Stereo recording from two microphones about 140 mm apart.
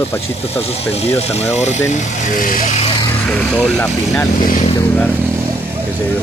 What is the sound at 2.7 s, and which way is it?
Vehicle, 45° left (ahead or behind).